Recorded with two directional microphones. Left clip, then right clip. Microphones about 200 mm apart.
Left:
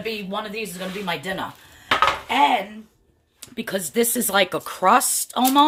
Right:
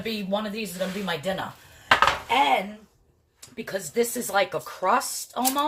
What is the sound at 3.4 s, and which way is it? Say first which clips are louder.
Speech: left 4 dB; 55° left (ahead or behind).